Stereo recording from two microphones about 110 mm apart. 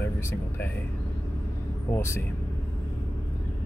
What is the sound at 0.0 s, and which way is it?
Speech, 20° left (ahead or behind).